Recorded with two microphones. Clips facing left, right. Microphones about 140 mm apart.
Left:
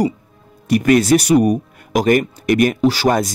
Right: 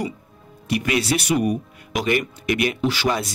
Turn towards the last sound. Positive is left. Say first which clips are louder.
# left 7 dB
turn(degrees=40)  # may be behind; listen again after turning